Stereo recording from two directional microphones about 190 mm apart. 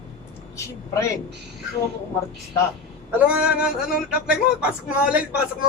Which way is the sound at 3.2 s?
5° right (ahead or behind).